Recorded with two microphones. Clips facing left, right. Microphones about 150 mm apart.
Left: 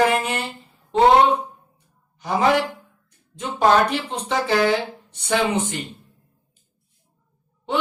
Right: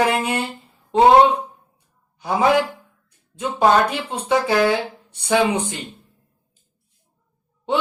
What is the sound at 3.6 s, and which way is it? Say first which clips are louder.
Speech: right 1 dB; 10° right (ahead or behind).